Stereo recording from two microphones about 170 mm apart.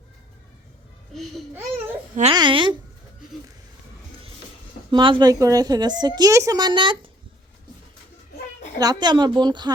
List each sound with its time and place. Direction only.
1.1 s babbling: centre (ahead or behind)
2.3 s a woman's voice: 30° right (ahead or behind)
4.9 s a woman's voice: 30° right (ahead or behind)
8.8 s a woman's voice: 25° right (ahead or behind)